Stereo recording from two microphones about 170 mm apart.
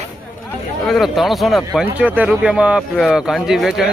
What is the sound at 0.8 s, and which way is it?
Speech, centre (ahead or behind).